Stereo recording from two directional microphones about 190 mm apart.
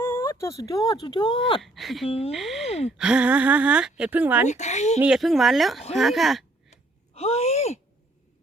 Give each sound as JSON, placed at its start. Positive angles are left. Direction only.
{"t": 0.0, "sound": "speech", "side_deg": 15}
{"t": 1.6, "sound": "speech", "side_deg": 0}
{"t": 2.0, "sound": "a child's voice", "side_deg": 30}
{"t": 2.3, "sound": "speech", "side_deg": 0}
{"t": 2.6, "sound": "a sound", "side_deg": 35}
{"t": 3.0, "sound": "speech", "side_deg": -5}
{"t": 4.4, "sound": "a child's voice", "side_deg": 35}
{"t": 4.9, "sound": "speech", "side_deg": -5}
{"t": 7.2, "sound": "speech", "side_deg": 35}